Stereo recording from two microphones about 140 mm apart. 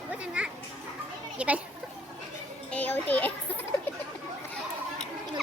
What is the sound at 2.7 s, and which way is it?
Music, 10° left (ahead or behind).